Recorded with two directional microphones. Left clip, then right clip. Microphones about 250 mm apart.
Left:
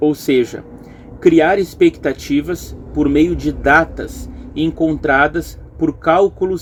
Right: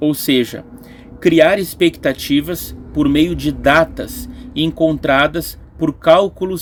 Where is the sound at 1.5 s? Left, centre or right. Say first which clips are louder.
Left 1 dB; right.